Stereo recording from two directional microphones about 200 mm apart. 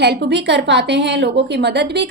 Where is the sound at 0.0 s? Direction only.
55° right (ahead or behind).